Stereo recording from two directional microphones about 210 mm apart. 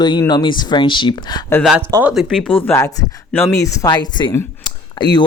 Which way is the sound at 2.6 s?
10° left (ahead or behind).